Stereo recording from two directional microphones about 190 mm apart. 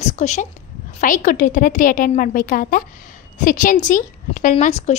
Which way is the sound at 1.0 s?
45° left (ahead or behind).